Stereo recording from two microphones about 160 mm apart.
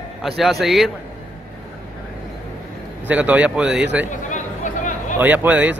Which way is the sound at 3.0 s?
10° right (ahead or behind).